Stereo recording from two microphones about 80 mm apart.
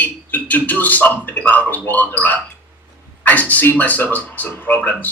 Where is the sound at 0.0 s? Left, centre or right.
Left.